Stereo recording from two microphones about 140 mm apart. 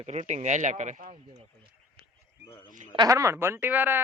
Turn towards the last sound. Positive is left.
turn(degrees=-15)  # may be behind; listen again after turning